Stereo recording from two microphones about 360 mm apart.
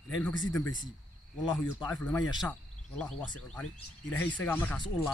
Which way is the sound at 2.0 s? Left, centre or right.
Centre.